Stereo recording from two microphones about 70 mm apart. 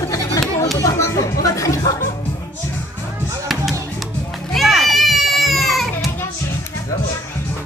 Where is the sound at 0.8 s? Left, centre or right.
Left.